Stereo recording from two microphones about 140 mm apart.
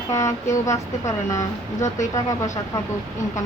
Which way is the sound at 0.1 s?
20° left (ahead or behind).